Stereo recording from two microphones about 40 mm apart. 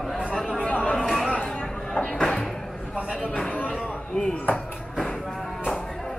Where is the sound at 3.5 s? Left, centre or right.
Left.